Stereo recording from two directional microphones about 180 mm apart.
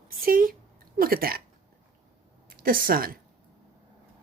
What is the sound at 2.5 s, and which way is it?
Speech, 55° right (ahead or behind).